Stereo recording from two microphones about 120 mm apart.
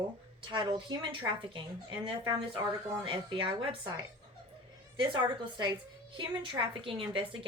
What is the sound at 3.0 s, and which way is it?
Speech, 45° right (ahead or behind).